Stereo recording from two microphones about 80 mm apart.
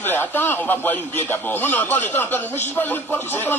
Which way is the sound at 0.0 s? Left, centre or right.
Left.